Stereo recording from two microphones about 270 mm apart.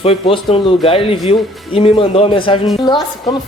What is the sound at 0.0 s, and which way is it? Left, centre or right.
A woman's voice, left.